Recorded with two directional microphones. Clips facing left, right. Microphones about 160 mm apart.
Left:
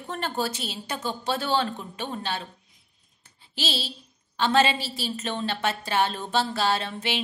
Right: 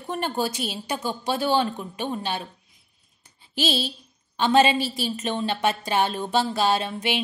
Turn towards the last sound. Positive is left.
turn(degrees=-15)  # may be behind; listen again after turning